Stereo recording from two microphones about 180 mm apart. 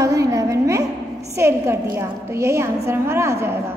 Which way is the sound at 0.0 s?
20° right (ahead or behind).